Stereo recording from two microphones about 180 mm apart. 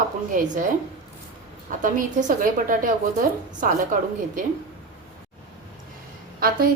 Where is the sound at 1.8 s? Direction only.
50° right (ahead or behind).